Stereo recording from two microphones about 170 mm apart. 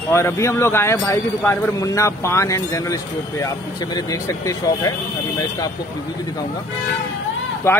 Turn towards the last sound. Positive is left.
turn(degrees=15)  # may be behind; listen again after turning